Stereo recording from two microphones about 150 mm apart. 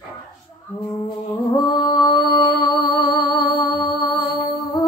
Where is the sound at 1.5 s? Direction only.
30° left (ahead or behind).